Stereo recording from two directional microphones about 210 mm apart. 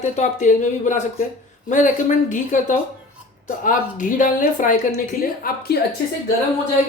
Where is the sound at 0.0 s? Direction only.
35° left (ahead or behind).